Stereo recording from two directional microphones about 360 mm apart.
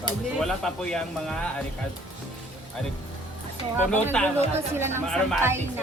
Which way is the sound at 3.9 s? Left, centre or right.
Centre.